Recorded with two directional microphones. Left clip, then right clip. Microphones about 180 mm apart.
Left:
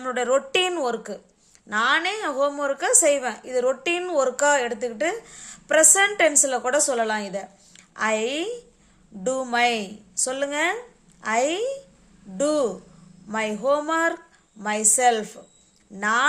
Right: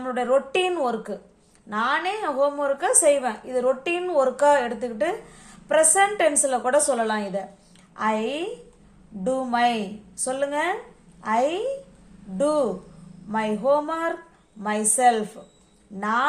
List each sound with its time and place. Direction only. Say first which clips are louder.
0.0 s a woman's voice: even; 40° left (ahead or behind)